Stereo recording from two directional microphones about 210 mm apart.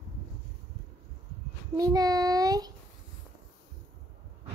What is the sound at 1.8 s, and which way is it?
Child singing, 15° right (ahead or behind).